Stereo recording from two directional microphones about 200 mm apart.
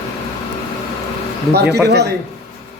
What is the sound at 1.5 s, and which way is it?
Speech, 55° right (ahead or behind).